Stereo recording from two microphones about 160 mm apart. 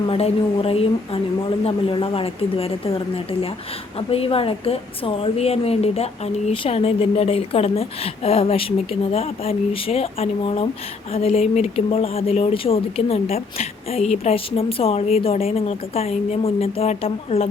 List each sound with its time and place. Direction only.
0.1 s a woman's voice: 40° left (ahead or behind)